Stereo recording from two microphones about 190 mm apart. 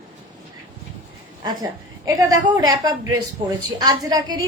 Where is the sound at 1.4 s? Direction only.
20° right (ahead or behind).